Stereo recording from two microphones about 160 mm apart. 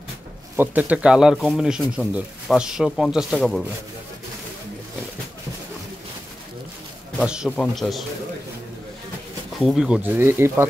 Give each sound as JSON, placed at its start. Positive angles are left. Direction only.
{"t": 0.6, "sound": "speech", "side_deg": -10}
{"t": 7.2, "sound": "speech", "side_deg": -5}
{"t": 9.6, "sound": "speech", "side_deg": 0}